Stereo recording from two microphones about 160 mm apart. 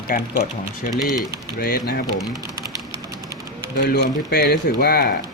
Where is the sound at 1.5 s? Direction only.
70° left (ahead or behind).